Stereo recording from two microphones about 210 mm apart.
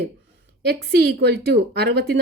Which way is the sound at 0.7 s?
50° right (ahead or behind).